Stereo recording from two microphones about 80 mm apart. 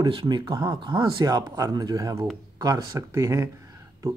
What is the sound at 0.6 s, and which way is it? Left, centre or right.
Speech, right.